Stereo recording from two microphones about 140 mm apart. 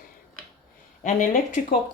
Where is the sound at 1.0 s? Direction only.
65° left (ahead or behind).